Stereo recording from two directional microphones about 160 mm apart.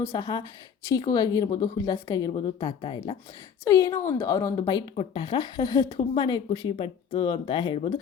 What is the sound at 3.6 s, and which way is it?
Speech, 20° left (ahead or behind).